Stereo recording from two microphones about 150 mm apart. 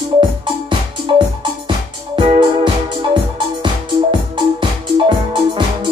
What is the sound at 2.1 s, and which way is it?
Music, 30° right (ahead or behind).